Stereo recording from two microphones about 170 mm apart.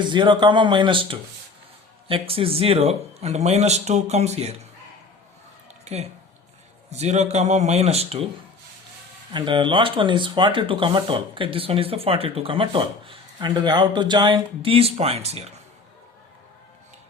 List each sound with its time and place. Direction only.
0.0 s speech: 30° right (ahead or behind)
5.8 s speech: 40° right (ahead or behind)
9.3 s speech: 30° right (ahead or behind)